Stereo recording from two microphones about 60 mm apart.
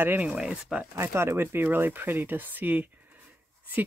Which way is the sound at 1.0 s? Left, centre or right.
Right.